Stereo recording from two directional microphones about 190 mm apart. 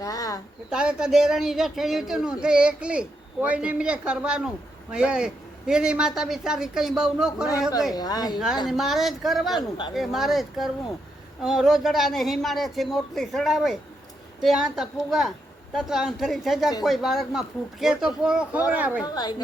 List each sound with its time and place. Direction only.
0.0 s a sound: 15° left (ahead or behind)
0.7 s speech: 5° right (ahead or behind)
7.9 s a woman's voice: 20° left (ahead or behind)
8.6 s speech: centre (ahead or behind)
9.6 s a woman's voice: 25° left (ahead or behind)
9.9 s speech: centre (ahead or behind)
19.0 s a woman's voice: 20° left (ahead or behind)